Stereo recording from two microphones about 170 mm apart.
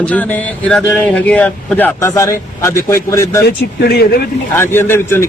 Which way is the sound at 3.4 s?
70° left (ahead or behind).